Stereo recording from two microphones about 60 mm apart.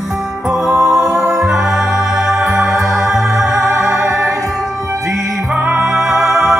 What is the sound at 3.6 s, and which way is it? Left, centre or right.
Music, right.